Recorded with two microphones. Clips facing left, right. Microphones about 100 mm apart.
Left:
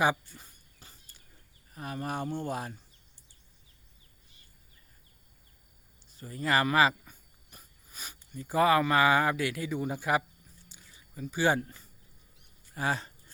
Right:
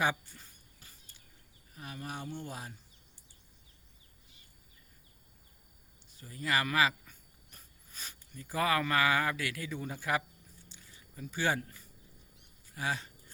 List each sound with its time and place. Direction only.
0.0 s a sound: 15° left (ahead or behind)
1.7 s speech: 50° left (ahead or behind)
6.1 s speech: 40° left (ahead or behind)
7.0 s dog: 10° left (ahead or behind)
8.4 s speech: 25° left (ahead or behind)
10.7 s a sound: 10° left (ahead or behind)
11.4 s speech: 30° left (ahead or behind)
12.7 s speech: 40° left (ahead or behind)